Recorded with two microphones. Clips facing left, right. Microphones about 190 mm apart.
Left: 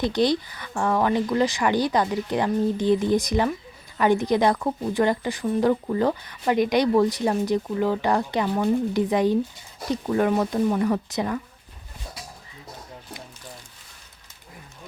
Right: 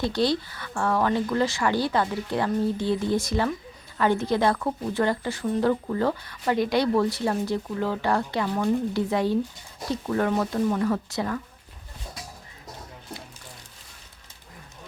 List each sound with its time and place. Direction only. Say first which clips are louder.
0.0 s a woman's voice: left 2 dB; 20° left (ahead or behind)